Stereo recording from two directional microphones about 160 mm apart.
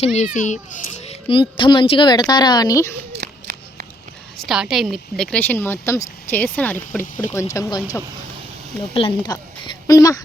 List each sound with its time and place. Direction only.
0.0 s a child's voice: 45° left (ahead or behind)
1.3 s speech: 30° left (ahead or behind)
3.2 s a sound: 90° right
4.4 s a woman's voice: 5° right (ahead or behind); by 7.8 s 20° left (ahead or behind)
9.0 s a woman's voice: 30° left (ahead or behind)